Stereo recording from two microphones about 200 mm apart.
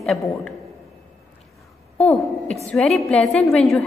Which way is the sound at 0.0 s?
Centre (ahead or behind).